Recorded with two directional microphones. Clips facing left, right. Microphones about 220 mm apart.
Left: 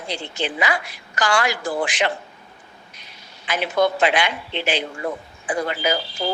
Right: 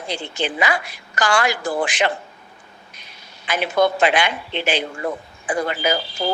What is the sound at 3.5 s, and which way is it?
A woman's voice, 50° right (ahead or behind).